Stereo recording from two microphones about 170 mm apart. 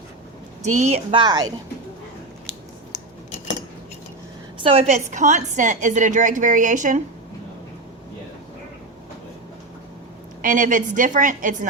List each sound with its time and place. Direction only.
0.6 s a woman's voice: 45° right (ahead or behind)
1.1 s speech: 25° right (ahead or behind)
4.5 s a woman's voice: 35° right (ahead or behind)
10.4 s a woman's voice: 50° right (ahead or behind)